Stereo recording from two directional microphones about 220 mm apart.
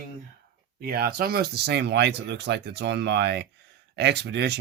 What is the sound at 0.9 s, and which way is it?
Speech, 45° right (ahead or behind).